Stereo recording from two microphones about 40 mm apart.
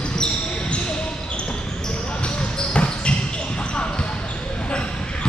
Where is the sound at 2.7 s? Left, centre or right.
Left.